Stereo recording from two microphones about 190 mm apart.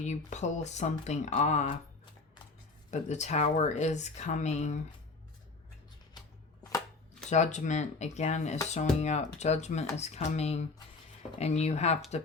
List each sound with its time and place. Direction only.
0.0 s speech: 40° left (ahead or behind)
2.9 s speech: 35° left (ahead or behind)
7.3 s speech: 35° left (ahead or behind)